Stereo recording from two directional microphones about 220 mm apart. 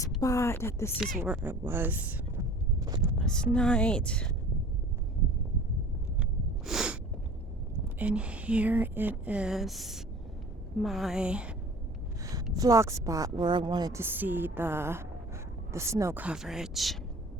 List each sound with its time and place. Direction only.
0.2 s speech: 15° left (ahead or behind)
0.9 s speech: 5° right (ahead or behind)
3.2 s speech: 5° left (ahead or behind)
6.7 s snort: 5° right (ahead or behind)
7.9 s speech: 5° right (ahead or behind)
12.2 s a sound: 15° right (ahead or behind)
12.5 s a woman's voice: 15° right (ahead or behind)